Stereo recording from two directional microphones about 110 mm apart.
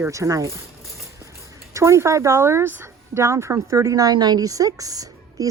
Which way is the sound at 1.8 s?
25° right (ahead or behind).